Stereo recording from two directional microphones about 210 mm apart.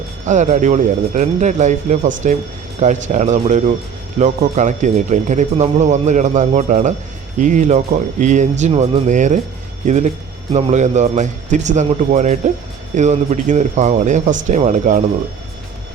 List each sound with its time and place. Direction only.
0.3 s speech: 35° right (ahead or behind)